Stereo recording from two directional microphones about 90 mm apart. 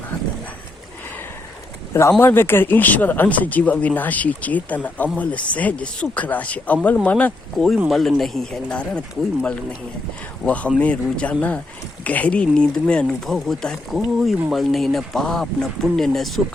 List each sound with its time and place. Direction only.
1.9 s speech: 30° left (ahead or behind)
7.5 s speech: centre (ahead or behind)
10.4 s speech: 15° left (ahead or behind)